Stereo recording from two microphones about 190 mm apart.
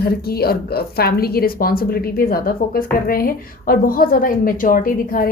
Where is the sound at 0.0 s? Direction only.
55° left (ahead or behind).